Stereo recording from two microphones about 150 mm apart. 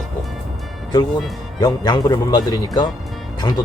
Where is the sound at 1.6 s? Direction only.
25° left (ahead or behind).